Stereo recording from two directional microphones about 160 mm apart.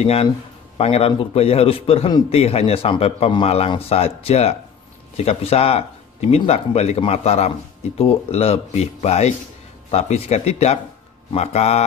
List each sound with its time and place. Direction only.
0.0 s speech: 40° left (ahead or behind)